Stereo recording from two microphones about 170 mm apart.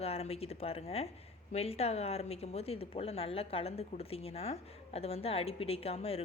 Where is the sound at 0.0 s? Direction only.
35° left (ahead or behind).